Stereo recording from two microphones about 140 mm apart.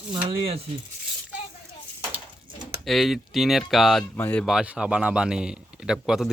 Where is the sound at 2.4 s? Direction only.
35° right (ahead or behind).